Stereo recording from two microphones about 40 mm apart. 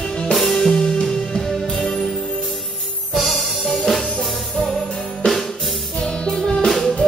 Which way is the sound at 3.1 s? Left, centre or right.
Centre.